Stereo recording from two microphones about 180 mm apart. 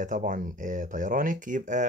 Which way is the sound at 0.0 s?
45° right (ahead or behind).